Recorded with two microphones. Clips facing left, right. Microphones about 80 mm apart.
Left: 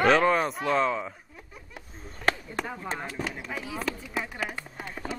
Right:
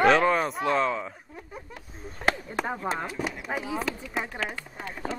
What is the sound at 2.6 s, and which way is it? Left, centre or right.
Speech, right.